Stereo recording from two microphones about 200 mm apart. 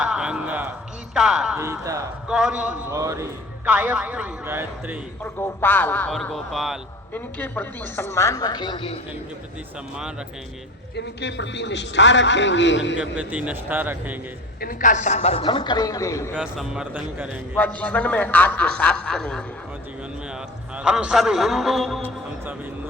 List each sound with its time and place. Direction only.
0.0 s music: 5° right (ahead or behind)
1.1 s a man's voice: centre (ahead or behind)
1.6 s a man's voice: 15° right (ahead or behind)
2.2 s a man's voice: 5° right (ahead or behind)
5.2 s a woman's voice: 10° left (ahead or behind)
10.9 s a man's voice: 60° left (ahead or behind)
13.1 s a man's voice: 5° right (ahead or behind)
14.6 s a man's voice: 40° left (ahead or behind); by 16.3 s 15° left (ahead or behind)
16.3 s a man's voice: 5° right (ahead or behind)
17.6 s a woman's voice: 5° left (ahead or behind)
20.7 s a man's voice: 5° right (ahead or behind)